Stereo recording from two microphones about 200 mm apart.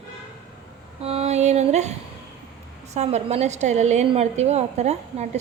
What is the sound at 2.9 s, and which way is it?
A woman's voice, 35° right (ahead or behind).